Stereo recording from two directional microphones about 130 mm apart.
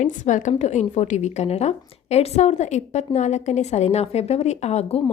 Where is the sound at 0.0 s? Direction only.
70° left (ahead or behind).